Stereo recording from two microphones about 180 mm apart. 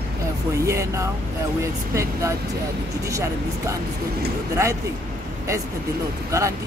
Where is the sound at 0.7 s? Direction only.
15° right (ahead or behind).